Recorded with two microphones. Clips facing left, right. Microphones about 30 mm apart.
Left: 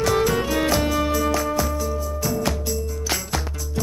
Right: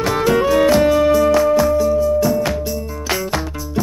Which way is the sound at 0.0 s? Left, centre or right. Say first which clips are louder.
Right 4 dB; centre.